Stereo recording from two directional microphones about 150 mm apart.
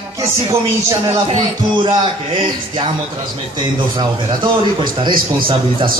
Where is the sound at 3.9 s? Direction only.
30° right (ahead or behind).